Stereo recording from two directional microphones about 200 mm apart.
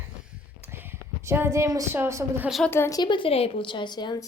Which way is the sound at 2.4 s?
Centre (ahead or behind).